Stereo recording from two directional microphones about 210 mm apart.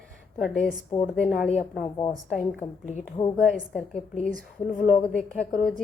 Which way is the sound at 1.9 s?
20° left (ahead or behind).